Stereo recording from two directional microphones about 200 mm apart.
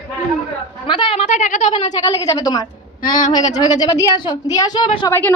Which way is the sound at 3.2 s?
40° left (ahead or behind).